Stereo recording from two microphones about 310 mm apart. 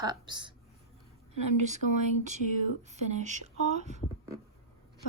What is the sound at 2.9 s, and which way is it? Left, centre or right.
Speech, right.